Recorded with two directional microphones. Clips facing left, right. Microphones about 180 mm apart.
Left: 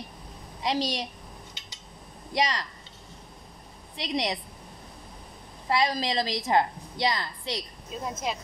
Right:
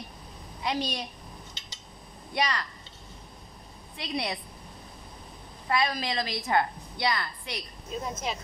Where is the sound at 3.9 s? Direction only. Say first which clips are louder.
Left 3 dB; 90° left.